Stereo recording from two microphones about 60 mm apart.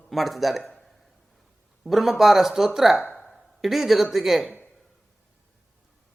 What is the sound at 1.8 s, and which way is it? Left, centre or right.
Speech, centre.